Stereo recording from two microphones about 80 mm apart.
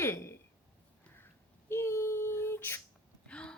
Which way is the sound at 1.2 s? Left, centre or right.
Left.